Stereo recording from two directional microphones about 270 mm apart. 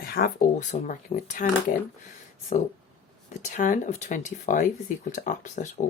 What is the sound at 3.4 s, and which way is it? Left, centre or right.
Speech, left.